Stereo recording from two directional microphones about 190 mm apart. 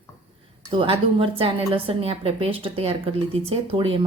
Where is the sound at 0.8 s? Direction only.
30° right (ahead or behind).